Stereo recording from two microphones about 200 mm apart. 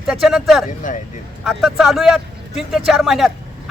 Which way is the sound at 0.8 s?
40° left (ahead or behind).